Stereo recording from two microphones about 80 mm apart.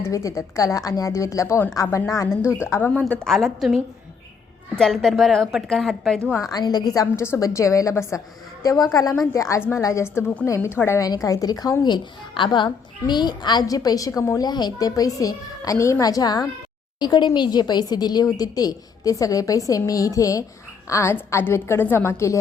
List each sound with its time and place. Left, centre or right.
0.0 s a woman's voice: left
2.2 s a woman's voice: left
3.2 s a woman's voice: centre
6.4 s speech: left
9.6 s a woman's voice: left
11.0 s speech: left
11.8 s a woman's voice: left